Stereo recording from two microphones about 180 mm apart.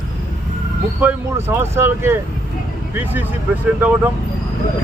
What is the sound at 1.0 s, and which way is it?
Speech, 10° right (ahead or behind).